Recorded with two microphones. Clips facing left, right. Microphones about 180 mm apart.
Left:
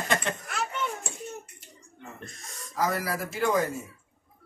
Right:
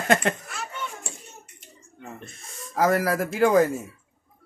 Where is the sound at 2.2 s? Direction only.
Centre (ahead or behind).